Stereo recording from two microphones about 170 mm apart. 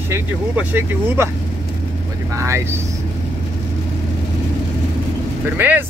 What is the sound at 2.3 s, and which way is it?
Speech, 15° right (ahead or behind).